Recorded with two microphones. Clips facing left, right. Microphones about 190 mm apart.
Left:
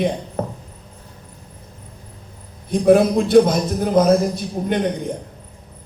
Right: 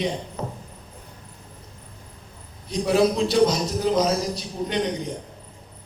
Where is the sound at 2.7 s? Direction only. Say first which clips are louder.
Left 6 dB; 55° left (ahead or behind).